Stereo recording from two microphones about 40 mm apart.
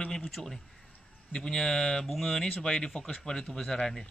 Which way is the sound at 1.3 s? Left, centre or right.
Centre.